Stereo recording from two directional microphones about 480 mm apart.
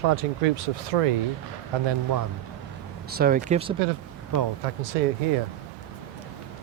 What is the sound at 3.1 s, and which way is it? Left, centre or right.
Speech, centre.